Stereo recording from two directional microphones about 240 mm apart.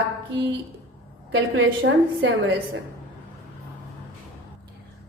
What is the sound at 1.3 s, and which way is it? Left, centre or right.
A woman's voice, right.